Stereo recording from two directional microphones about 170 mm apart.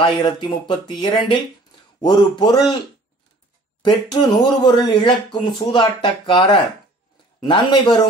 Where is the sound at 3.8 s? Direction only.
25° left (ahead or behind).